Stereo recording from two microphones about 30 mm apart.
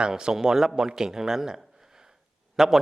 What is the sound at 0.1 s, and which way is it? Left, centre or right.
A man's voice, right.